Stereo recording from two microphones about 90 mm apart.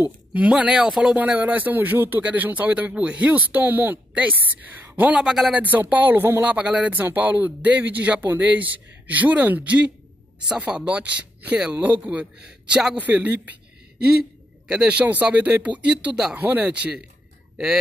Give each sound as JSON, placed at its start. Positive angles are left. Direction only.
{"t": 0.3, "sound": "speech", "side_deg": -15}
{"t": 1.1, "sound": "speech", "side_deg": -15}
{"t": 5.2, "sound": "speech", "side_deg": -5}
{"t": 5.6, "sound": "speech", "side_deg": -20}
{"t": 14.7, "sound": "speech", "side_deg": -10}
{"t": 16.3, "sound": "speech", "side_deg": -20}